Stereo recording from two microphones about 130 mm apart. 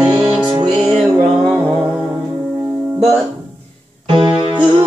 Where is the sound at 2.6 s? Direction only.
20° right (ahead or behind).